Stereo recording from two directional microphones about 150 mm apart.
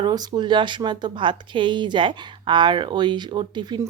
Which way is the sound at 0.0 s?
25° right (ahead or behind).